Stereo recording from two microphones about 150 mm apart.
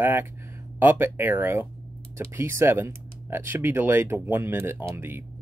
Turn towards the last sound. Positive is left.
turn(degrees=-15)  # may be behind; listen again after turning